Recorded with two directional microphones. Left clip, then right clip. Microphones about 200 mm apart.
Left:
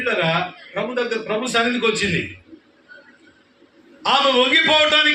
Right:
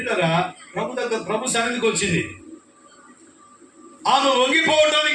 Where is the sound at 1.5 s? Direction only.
25° left (ahead or behind).